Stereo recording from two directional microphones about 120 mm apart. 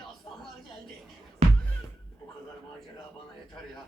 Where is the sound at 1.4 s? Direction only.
55° right (ahead or behind).